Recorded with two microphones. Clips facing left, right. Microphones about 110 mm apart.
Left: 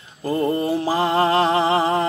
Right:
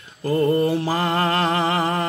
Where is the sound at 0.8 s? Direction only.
20° left (ahead or behind).